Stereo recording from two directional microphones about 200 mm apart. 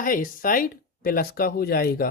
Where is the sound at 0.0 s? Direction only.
45° left (ahead or behind).